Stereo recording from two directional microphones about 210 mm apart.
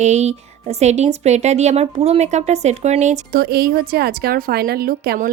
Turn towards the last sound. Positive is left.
turn(degrees=-45)  # may be behind; listen again after turning